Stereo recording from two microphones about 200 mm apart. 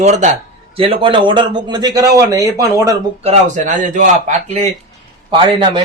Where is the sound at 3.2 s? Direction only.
35° right (ahead or behind).